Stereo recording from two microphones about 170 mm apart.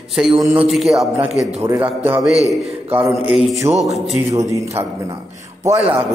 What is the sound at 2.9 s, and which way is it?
Speech, 10° right (ahead or behind).